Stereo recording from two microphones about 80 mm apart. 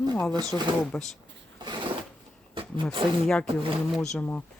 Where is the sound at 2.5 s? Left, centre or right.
Right.